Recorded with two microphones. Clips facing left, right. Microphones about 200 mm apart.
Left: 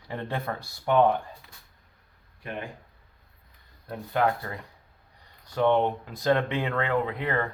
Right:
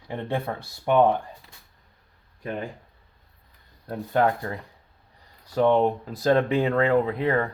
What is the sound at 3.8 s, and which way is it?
Speech, 30° right (ahead or behind).